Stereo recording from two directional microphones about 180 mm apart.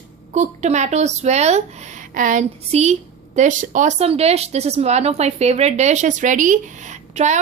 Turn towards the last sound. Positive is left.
turn(degrees=-40)  # may be behind; listen again after turning